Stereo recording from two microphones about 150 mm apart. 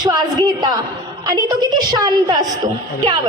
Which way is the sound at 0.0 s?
25° right (ahead or behind).